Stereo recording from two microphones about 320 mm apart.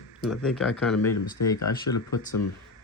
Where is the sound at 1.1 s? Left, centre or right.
Left.